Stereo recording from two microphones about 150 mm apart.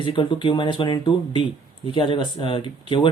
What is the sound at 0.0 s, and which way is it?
Speech, 30° left (ahead or behind).